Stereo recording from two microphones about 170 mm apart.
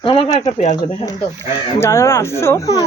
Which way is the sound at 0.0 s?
30° left (ahead or behind).